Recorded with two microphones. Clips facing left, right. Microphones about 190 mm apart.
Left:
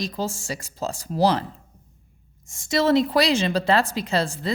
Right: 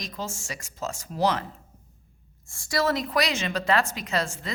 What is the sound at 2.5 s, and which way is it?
A woman's voice, 20° left (ahead or behind).